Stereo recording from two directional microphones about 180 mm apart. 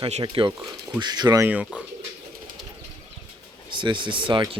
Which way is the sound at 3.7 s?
25° right (ahead or behind).